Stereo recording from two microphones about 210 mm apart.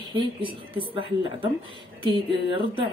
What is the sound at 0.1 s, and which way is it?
A woman's voice, 25° right (ahead or behind).